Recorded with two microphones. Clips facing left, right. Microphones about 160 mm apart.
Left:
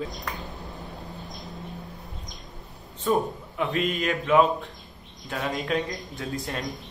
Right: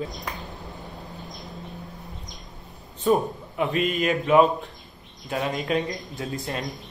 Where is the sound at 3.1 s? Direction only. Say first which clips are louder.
Right 3 dB; 5° right (ahead or behind).